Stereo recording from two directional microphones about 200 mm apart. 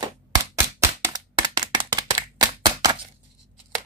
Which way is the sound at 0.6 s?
15° right (ahead or behind).